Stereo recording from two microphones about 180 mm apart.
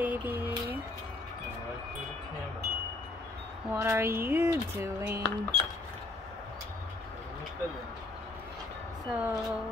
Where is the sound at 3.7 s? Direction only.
15° right (ahead or behind).